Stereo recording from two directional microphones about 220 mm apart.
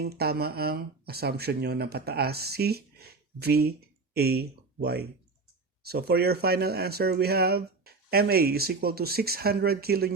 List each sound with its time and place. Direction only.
0.0 s speech: 45° right (ahead or behind)